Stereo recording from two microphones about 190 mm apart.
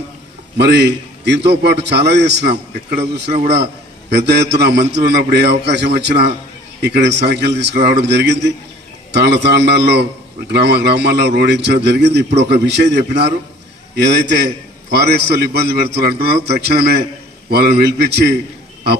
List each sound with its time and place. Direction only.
0.5 s a man's voice: 60° right (ahead or behind)
3.3 s a man's voice: 50° right (ahead or behind)
4.1 s a man's voice: 60° right (ahead or behind)